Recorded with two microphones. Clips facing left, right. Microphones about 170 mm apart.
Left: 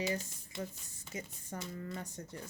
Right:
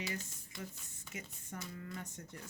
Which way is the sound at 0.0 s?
25° left (ahead or behind).